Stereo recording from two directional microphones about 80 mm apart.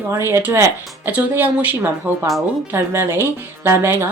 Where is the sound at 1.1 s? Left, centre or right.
Centre.